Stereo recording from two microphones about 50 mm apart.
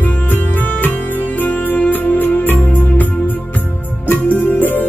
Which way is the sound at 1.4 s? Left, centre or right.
Left.